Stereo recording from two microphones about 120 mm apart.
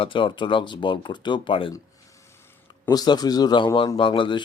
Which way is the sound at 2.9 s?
35° left (ahead or behind).